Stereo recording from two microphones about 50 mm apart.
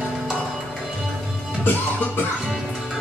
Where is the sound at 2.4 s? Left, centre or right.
Centre.